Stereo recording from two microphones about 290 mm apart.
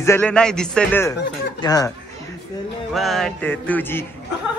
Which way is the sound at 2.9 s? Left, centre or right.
Centre.